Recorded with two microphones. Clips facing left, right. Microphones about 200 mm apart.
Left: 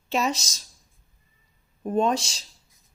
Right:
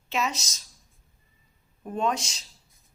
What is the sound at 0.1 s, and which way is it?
Speech, 30° left (ahead or behind).